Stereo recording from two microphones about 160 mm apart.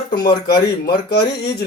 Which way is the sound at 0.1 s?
30° left (ahead or behind).